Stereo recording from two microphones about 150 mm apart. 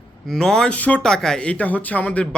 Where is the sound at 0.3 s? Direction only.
5° left (ahead or behind).